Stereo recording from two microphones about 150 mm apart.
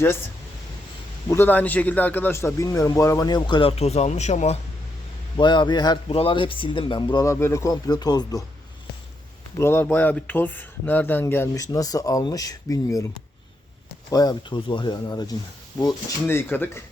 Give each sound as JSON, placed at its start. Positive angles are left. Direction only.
{"t": 1.3, "sound": "a man's voice", "side_deg": 15}
{"t": 5.4, "sound": "a man's voice", "side_deg": 30}
{"t": 9.6, "sound": "speech", "side_deg": 15}
{"t": 14.1, "sound": "a man's voice", "side_deg": 25}
{"t": 16.2, "sound": "speech", "side_deg": 15}